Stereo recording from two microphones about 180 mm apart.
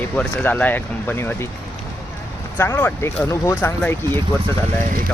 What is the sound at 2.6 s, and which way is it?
Speech, 10° left (ahead or behind).